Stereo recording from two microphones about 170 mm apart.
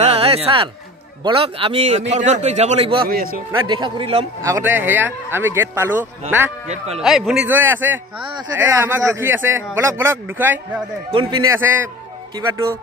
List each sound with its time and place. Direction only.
0.0 s a sound: 35° right (ahead or behind)
1.2 s a man's voice: 35° right (ahead or behind)
3.1 s speech: 60° right (ahead or behind)
3.5 s speech: 25° right (ahead or behind)
4.4 s speech: 15° right (ahead or behind)
7.0 s speech: centre (ahead or behind)
11.1 s speech: 30° right (ahead or behind)
11.5 s speech: 15° right (ahead or behind)